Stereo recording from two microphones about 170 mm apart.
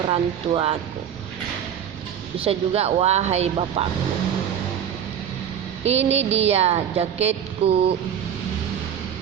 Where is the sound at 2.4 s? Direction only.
35° right (ahead or behind).